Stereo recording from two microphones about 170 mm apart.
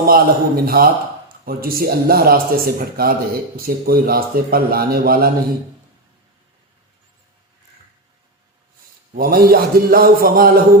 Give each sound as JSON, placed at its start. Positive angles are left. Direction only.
{"t": 0.0, "sound": "speech", "side_deg": -60}
{"t": 9.1, "sound": "speech", "side_deg": -60}